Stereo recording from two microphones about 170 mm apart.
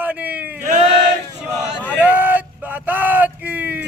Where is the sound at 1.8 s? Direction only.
10° right (ahead or behind).